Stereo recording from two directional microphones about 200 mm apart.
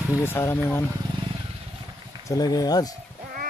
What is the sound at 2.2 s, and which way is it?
Speech, 20° left (ahead or behind).